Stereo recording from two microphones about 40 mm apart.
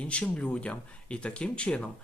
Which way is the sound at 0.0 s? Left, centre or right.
Left.